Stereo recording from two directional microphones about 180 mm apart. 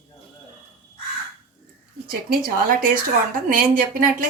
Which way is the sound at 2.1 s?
55° right (ahead or behind).